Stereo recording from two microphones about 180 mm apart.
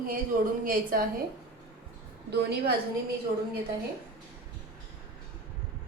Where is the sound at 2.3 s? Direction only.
65° right (ahead or behind).